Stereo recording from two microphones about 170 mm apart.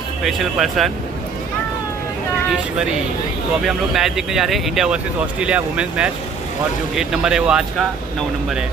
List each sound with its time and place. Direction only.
0.2 s speech: centre (ahead or behind)
3.6 s speech: centre (ahead or behind)